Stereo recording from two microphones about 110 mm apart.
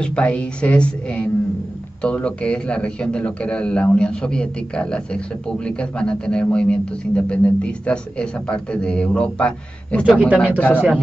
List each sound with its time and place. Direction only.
0.0 s a man's voice: 10° left (ahead or behind)
10.0 s a man's voice: 10° right (ahead or behind)